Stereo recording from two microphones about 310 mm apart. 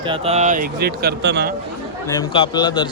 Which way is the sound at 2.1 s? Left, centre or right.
Centre.